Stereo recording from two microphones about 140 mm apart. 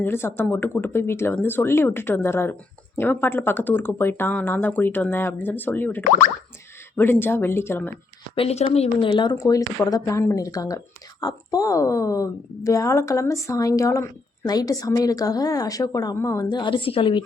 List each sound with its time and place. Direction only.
0.0 s speech: 15° left (ahead or behind)
8.4 s speech: 45° left (ahead or behind)
9.3 s speech: 25° left (ahead or behind)